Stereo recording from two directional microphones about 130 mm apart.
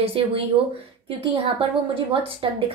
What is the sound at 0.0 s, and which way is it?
A woman's voice, 50° right (ahead or behind).